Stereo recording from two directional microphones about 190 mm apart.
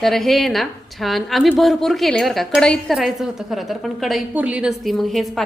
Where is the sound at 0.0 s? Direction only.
Centre (ahead or behind).